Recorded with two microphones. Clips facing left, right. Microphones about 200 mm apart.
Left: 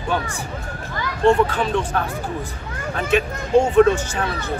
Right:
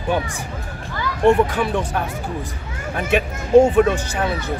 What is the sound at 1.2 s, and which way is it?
Speech, 15° right (ahead or behind).